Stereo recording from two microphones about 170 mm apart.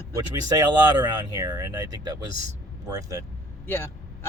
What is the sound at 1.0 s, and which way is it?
Speech, 25° right (ahead or behind).